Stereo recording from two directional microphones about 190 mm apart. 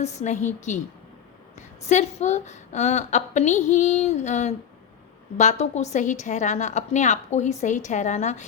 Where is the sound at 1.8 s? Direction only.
35° left (ahead or behind).